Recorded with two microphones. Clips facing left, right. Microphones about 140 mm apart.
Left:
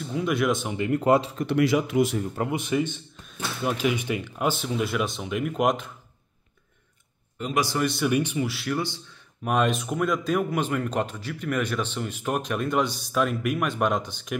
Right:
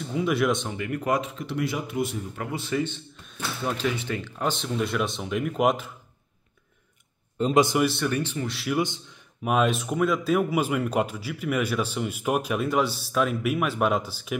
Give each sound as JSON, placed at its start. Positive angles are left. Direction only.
{"t": 0.0, "sound": "speech", "side_deg": 0}
{"t": 0.7, "sound": "speech", "side_deg": 25}
{"t": 1.4, "sound": "speech", "side_deg": 75}
{"t": 2.3, "sound": "speech", "side_deg": 20}
{"t": 3.3, "sound": "speech", "side_deg": 0}
{"t": 3.7, "sound": "speech", "side_deg": 15}
{"t": 7.3, "sound": "a man's voice", "side_deg": -30}
{"t": 7.8, "sound": "speech", "side_deg": 0}
{"t": 8.1, "sound": "speech", "side_deg": 15}
{"t": 8.5, "sound": "speech", "side_deg": 0}
{"t": 8.7, "sound": "a man's voice", "side_deg": -20}
{"t": 9.4, "sound": "speech", "side_deg": -5}